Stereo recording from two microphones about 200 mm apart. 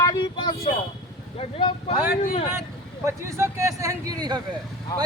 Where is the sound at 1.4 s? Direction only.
30° left (ahead or behind).